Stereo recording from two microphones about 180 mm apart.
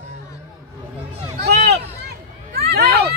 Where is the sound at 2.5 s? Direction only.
60° right (ahead or behind).